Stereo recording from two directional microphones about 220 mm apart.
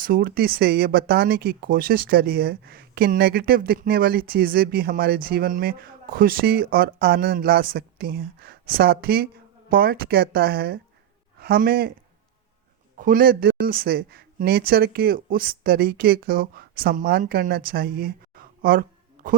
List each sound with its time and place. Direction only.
0.0 s speech: 40° right (ahead or behind)
13.0 s speech: 40° right (ahead or behind)